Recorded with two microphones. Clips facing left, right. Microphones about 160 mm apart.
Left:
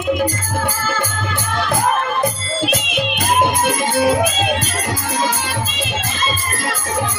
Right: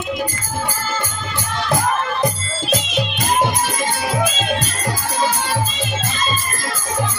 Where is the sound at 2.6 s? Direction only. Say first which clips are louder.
Even; 60° left (ahead or behind).